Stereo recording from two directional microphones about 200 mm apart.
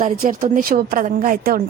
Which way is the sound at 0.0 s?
45° right (ahead or behind).